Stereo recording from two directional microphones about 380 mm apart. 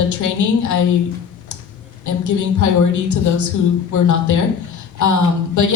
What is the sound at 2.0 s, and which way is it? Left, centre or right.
A woman's voice, left.